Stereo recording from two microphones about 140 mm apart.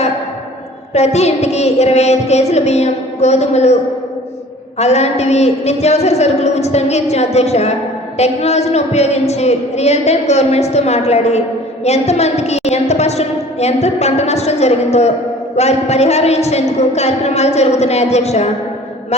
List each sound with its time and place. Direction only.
0.9 s a woman's voice: 50° left (ahead or behind)
4.8 s a woman's voice: 50° left (ahead or behind)